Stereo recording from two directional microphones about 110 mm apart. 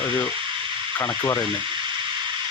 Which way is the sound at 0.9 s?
25° left (ahead or behind).